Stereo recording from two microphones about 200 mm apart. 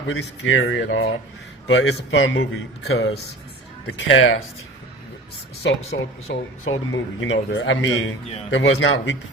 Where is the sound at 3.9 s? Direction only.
80° left.